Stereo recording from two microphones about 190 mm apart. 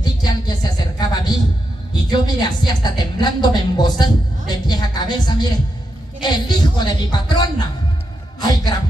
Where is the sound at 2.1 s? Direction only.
20° left (ahead or behind).